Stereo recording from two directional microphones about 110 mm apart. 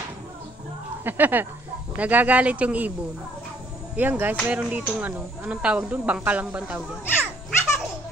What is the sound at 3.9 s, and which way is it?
A woman's voice, 15° right (ahead or behind).